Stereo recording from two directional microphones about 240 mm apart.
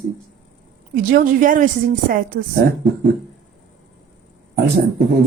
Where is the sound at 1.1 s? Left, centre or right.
Right.